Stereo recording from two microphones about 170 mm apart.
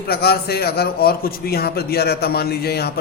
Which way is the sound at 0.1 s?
70° left (ahead or behind).